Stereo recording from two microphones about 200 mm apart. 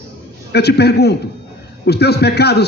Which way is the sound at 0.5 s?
55° left (ahead or behind).